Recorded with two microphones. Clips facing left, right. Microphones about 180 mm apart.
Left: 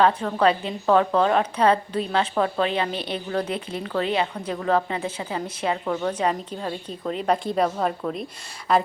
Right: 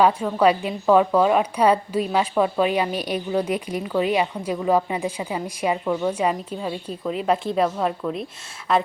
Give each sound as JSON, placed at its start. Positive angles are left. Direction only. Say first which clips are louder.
{"t": 0.0, "sound": "a woman's voice", "louder": "right 2 dB", "side_deg": -10}